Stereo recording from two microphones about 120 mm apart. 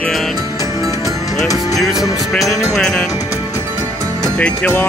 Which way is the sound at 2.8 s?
5° left (ahead or behind).